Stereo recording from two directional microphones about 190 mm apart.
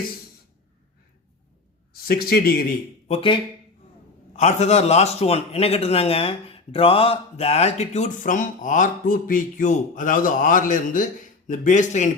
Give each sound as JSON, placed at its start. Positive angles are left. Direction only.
{"t": 2.0, "sound": "speech", "side_deg": 50}
{"t": 3.1, "sound": "speech", "side_deg": 25}
{"t": 4.4, "sound": "a man's voice", "side_deg": 35}